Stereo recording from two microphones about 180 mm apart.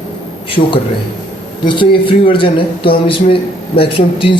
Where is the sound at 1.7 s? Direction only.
30° left (ahead or behind).